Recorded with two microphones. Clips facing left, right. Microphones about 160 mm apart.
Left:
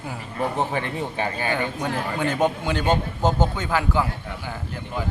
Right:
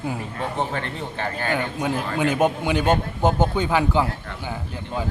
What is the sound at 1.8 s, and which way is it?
A man's voice, 10° right (ahead or behind).